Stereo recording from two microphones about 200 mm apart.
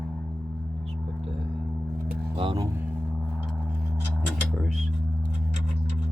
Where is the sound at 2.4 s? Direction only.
25° right (ahead or behind).